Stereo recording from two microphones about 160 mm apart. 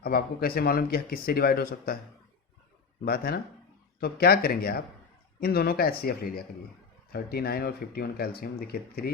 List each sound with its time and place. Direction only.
0.0 s speech: 75° left (ahead or behind)
3.0 s speech: 70° left (ahead or behind)